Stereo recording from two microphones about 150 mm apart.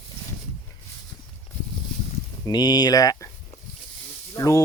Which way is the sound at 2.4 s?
25° left (ahead or behind).